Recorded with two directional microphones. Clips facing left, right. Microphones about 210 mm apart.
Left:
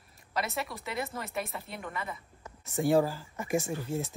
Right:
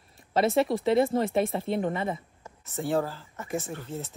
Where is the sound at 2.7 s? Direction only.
15° left (ahead or behind).